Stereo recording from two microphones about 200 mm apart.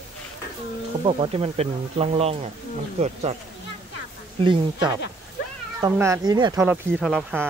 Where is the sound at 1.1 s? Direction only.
30° right (ahead or behind).